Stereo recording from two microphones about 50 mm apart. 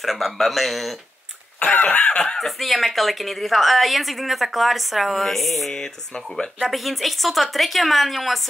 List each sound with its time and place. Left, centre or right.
0.0 s a woman's voice: centre
1.6 s cough: left
2.0 s speech: centre
2.3 s a woman's voice: centre